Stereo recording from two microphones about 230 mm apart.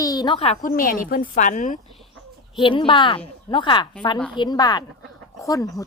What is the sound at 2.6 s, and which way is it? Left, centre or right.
A woman's voice, left.